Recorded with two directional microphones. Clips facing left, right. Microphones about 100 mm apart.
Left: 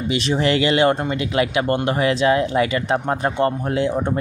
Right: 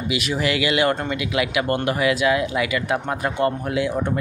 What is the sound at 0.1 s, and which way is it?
Speech, 30° left (ahead or behind).